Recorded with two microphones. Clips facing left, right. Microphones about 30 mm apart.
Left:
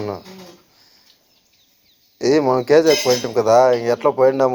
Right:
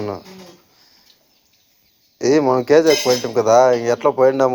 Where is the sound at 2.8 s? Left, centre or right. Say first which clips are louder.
Even; centre.